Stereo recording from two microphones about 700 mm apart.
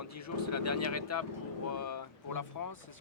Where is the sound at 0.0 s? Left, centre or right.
Left.